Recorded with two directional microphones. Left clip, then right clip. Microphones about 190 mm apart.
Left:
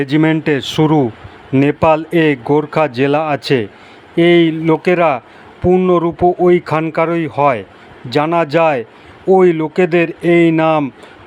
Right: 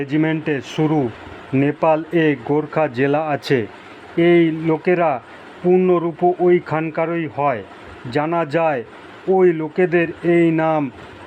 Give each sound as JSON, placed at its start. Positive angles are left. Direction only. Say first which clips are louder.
{"t": 0.0, "sound": "speech", "louder": "left 6 dB", "side_deg": 15}
{"t": 5.9, "sound": "speech", "louder": "left 4 dB", "side_deg": 20}